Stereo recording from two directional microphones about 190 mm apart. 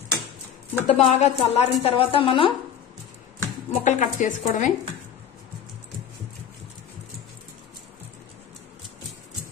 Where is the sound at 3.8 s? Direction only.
40° left (ahead or behind).